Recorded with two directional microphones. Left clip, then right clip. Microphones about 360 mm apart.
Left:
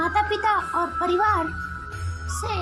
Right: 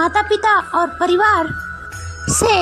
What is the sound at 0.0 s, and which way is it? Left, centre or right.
A woman's voice, centre.